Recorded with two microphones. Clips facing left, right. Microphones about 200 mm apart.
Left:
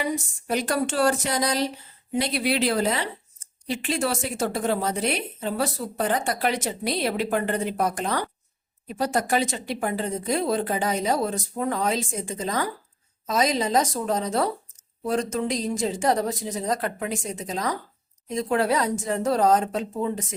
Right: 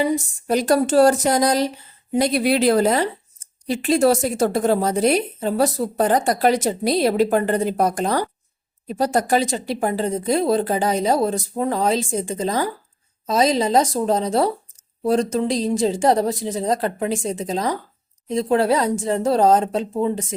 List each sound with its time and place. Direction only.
0.0 s a woman's voice: 35° right (ahead or behind)